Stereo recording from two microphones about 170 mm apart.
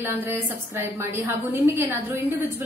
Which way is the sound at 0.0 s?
10° right (ahead or behind).